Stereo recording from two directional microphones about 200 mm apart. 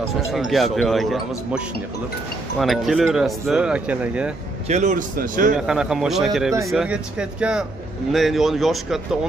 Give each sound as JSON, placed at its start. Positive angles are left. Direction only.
{"t": 0.3, "sound": "speech", "side_deg": 0}
{"t": 2.6, "sound": "speech", "side_deg": 0}
{"t": 4.6, "sound": "a man's voice", "side_deg": -35}
{"t": 5.6, "sound": "speech", "side_deg": -5}